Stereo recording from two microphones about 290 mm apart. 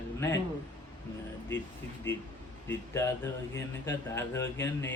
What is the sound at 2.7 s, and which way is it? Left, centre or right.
A man's voice, centre.